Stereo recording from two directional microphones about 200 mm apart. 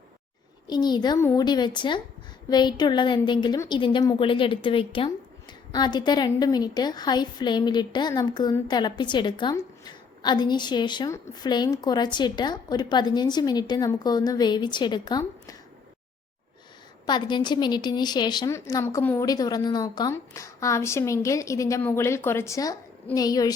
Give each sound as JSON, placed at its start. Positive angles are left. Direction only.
{"t": 0.7, "sound": "a woman's voice", "side_deg": 20}
{"t": 17.1, "sound": "a woman's voice", "side_deg": 20}